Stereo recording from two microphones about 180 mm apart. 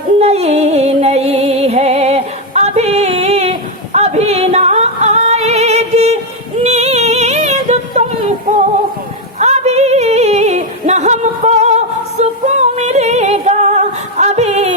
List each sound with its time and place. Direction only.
0.2 s music: 35° right (ahead or behind)
6.6 s female singing: 35° right (ahead or behind)
9.4 s yodeling: 40° right (ahead or behind)